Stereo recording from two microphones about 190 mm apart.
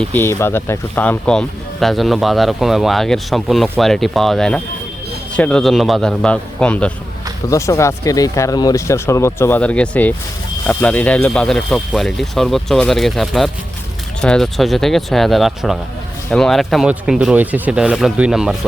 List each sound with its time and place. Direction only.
0.0 s speech: 10° left (ahead or behind)